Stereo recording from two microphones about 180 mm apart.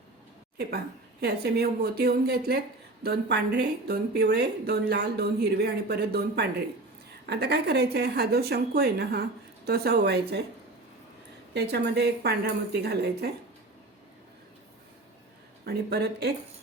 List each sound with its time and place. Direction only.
1.2 s a woman's voice: 65° right (ahead or behind)
11.5 s speech: 65° right (ahead or behind)
15.6 s a woman's voice: 65° right (ahead or behind)